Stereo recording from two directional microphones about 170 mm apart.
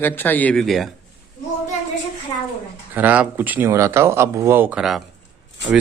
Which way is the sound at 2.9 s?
10° right (ahead or behind).